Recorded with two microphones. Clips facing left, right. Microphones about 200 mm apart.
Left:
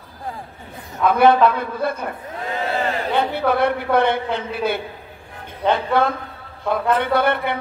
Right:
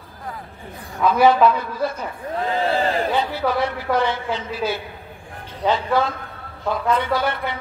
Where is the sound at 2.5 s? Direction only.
30° right (ahead or behind).